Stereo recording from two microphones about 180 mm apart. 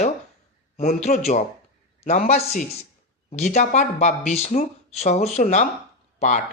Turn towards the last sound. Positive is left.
turn(degrees=45)  # may be behind; listen again after turning